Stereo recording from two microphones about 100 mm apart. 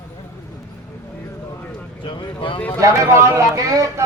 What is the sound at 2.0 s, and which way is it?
Speech, 55° left (ahead or behind).